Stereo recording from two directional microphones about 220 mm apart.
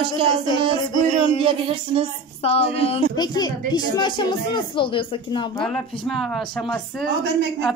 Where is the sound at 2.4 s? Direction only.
25° left (ahead or behind).